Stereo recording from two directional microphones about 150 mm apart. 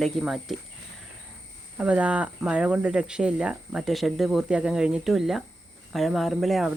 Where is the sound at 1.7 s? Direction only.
10° right (ahead or behind).